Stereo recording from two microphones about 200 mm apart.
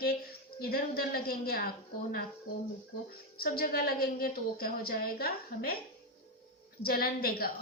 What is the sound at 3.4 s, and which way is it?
A woman's voice, 50° left (ahead or behind).